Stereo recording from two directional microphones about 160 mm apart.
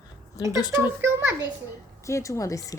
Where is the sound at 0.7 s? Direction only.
15° right (ahead or behind).